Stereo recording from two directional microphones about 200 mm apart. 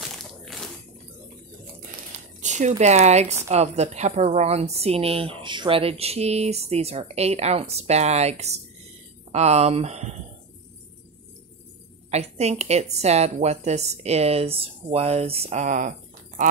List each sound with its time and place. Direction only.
0.0 s crushing: centre (ahead or behind)
2.4 s a sound: 35° right (ahead or behind)
2.8 s a woman's voice: 35° right (ahead or behind)
12.1 s a woman's voice: 30° right (ahead or behind)